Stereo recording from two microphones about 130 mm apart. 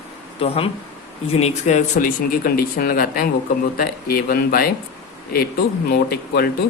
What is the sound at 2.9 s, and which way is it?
Speech, 90° left.